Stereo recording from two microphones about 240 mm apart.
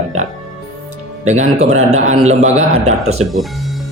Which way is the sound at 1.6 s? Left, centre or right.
Right.